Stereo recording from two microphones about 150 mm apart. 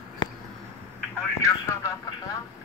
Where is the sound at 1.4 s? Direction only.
20° left (ahead or behind).